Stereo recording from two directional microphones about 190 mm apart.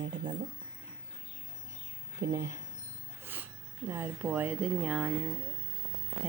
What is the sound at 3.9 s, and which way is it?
Speech, 10° right (ahead or behind).